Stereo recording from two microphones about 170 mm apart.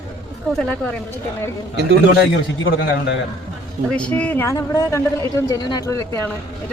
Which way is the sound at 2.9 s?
90° left.